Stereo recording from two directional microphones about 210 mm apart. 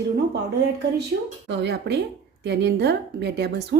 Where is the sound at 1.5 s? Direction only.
55° right (ahead or behind).